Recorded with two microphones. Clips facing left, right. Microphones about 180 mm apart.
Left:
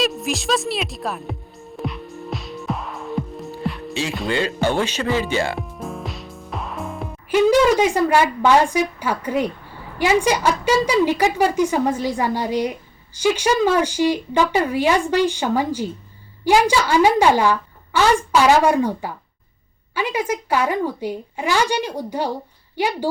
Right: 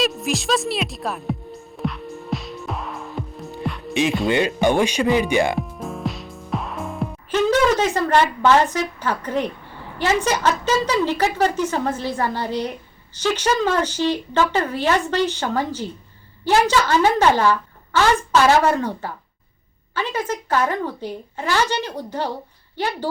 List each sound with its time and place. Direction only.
0.0 s music: centre (ahead or behind)
4.3 s speech: 15° right (ahead or behind)
5.5 s music: centre (ahead or behind)
7.3 s a woman's voice: 10° left (ahead or behind)